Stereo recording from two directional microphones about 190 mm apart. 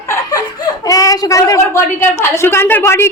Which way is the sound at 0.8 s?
20° left (ahead or behind).